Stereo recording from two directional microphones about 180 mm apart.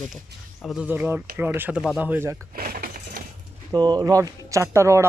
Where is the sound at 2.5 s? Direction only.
55° right (ahead or behind).